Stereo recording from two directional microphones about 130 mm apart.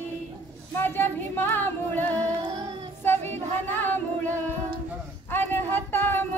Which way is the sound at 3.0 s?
15° left (ahead or behind).